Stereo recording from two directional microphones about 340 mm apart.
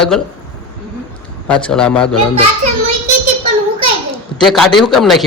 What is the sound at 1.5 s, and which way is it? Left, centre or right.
Speech, centre.